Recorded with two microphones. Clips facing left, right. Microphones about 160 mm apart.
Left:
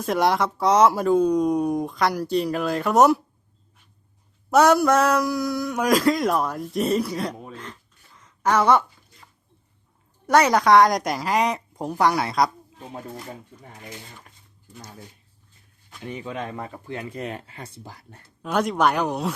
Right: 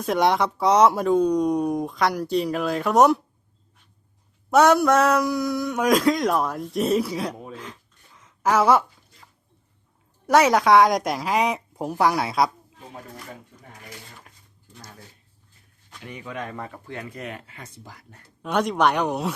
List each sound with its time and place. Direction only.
0.0 s speech: centre (ahead or behind)
4.5 s speech: centre (ahead or behind)
16.0 s speech: 25° left (ahead or behind)
17.0 s speech: 30° left (ahead or behind)
18.4 s speech: centre (ahead or behind)